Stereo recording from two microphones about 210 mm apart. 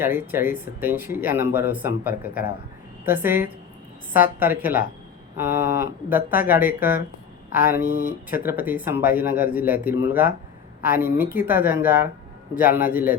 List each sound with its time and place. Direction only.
0.0 s speech: 10° right (ahead or behind)
7.9 s speech: 40° right (ahead or behind)
8.3 s speech: 10° right (ahead or behind)